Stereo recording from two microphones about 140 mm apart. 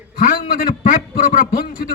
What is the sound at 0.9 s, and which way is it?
Speech, 65° left (ahead or behind).